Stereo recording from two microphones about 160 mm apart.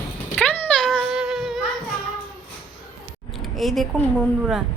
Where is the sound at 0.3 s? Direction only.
10° left (ahead or behind).